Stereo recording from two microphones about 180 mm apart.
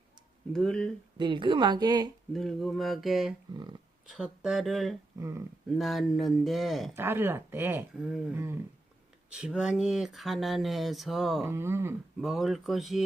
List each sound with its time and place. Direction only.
0.5 s speech: 5° left (ahead or behind)
1.2 s speech: 25° right (ahead or behind)
2.3 s speech: centre (ahead or behind)
3.5 s speech: 25° right (ahead or behind)
4.0 s speech: 5° right (ahead or behind)
5.2 s speech: 15° right (ahead or behind)
5.7 s speech: centre (ahead or behind)
6.9 s speech: 15° right (ahead or behind)
8.4 s speech: 15° right (ahead or behind)
11.4 s speech: 15° right (ahead or behind)
12.2 s speech: centre (ahead or behind)